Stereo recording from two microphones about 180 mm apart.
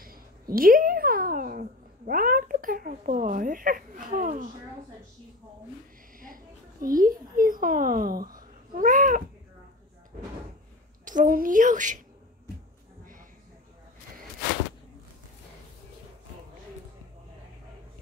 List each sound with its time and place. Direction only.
0.0 s cat: 55° right (ahead or behind)
6.1 s speech: 50° right (ahead or behind)
11.1 s a woman's voice: 50° right (ahead or behind)